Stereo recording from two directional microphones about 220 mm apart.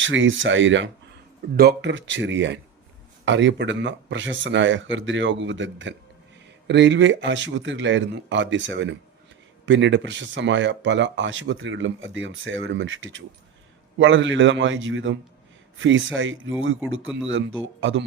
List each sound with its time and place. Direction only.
0.0 s speech: 60° right (ahead or behind)